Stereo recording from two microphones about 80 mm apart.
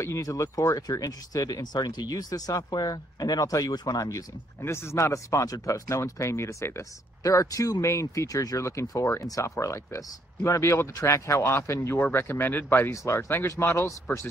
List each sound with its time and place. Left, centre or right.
0.0 s speech: left
12.9 s speech: left